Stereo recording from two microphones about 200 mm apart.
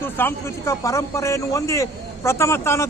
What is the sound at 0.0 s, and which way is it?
A man's voice, 10° left (ahead or behind).